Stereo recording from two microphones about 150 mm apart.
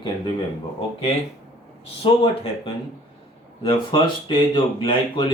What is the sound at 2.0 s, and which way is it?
Speech, 35° left (ahead or behind).